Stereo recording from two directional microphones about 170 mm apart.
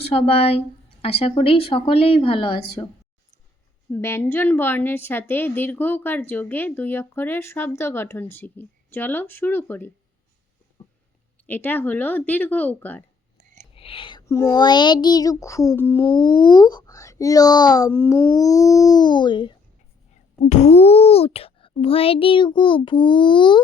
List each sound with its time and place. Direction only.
0.1 s a child's voice: 35° left (ahead or behind)
3.9 s a woman's voice: 15° left (ahead or behind)
11.4 s a woman's voice: 10° left (ahead or behind)
13.4 s whispering: 45° right (ahead or behind)
13.7 s whispering: 30° left (ahead or behind)
14.3 s a child's voice: 15° left (ahead or behind)
20.5 s a child's voice: 40° left (ahead or behind)